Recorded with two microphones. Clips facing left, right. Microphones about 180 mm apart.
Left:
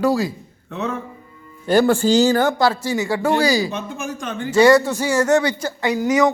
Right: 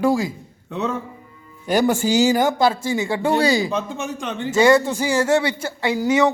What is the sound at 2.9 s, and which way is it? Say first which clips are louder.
Speech: left 1 dB; 25° right (ahead or behind).